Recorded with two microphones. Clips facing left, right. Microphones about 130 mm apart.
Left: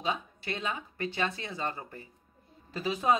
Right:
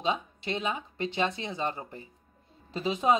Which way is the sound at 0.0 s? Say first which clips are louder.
Right 3 dB; 20° right (ahead or behind).